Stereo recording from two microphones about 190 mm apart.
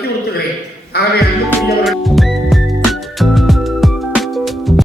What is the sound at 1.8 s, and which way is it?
Music, centre (ahead or behind).